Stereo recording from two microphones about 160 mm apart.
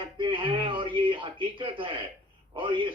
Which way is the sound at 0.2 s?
30° right (ahead or behind).